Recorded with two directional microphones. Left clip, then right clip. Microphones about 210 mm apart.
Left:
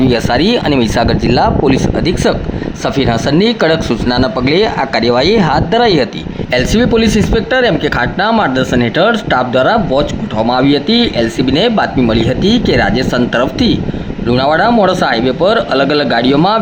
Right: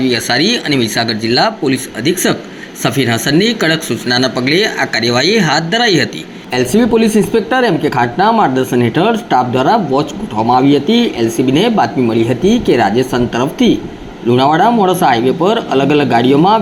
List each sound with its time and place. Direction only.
0.0 s speech: 30° left (ahead or behind)